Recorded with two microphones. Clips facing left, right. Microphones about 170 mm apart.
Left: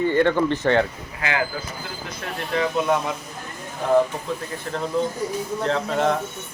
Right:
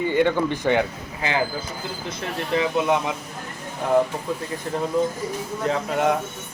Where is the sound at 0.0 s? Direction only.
15° right (ahead or behind).